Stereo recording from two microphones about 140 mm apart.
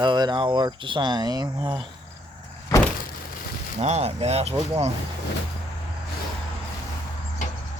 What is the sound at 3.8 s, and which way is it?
Speech, 50° right (ahead or behind).